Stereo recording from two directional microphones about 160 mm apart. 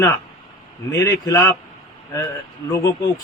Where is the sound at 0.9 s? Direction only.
20° left (ahead or behind).